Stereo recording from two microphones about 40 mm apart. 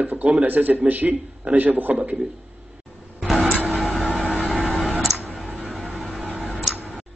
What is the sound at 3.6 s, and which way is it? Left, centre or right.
Vehicle, right.